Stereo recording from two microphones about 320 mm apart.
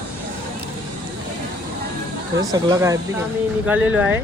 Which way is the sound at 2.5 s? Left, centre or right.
Centre.